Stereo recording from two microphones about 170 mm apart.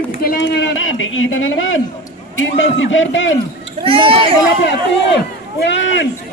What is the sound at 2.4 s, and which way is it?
Speech, 90° left.